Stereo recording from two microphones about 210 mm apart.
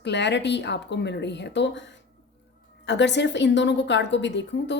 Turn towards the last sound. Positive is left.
turn(degrees=55)  # may be behind; listen again after turning